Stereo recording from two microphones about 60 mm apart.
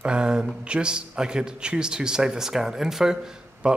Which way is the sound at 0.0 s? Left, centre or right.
Centre.